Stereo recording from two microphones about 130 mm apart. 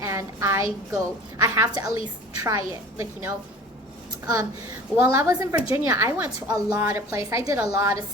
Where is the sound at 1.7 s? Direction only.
30° right (ahead or behind).